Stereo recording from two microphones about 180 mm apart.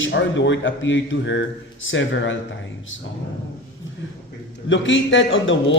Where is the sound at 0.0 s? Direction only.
85° left.